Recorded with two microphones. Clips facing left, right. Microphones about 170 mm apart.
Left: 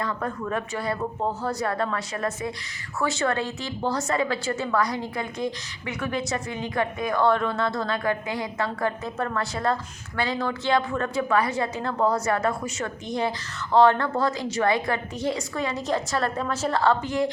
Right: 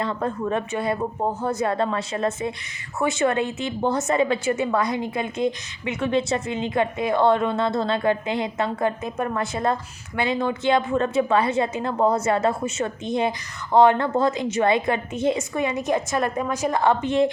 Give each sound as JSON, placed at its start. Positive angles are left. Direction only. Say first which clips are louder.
{"t": 0.0, "sound": "a woman's voice", "louder": "right 4 dB", "side_deg": -25}